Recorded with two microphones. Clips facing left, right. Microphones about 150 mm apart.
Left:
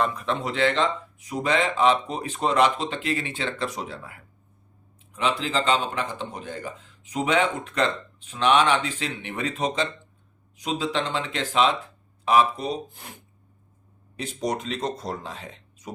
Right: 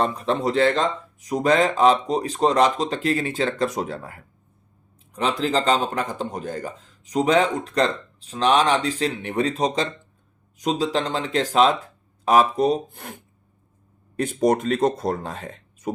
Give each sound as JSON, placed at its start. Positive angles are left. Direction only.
{"t": 0.0, "sound": "speech", "side_deg": -35}
{"t": 14.2, "sound": "speech", "side_deg": -50}